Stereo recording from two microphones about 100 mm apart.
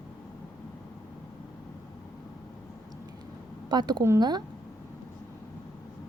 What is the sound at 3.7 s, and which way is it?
Speech, 45° right (ahead or behind).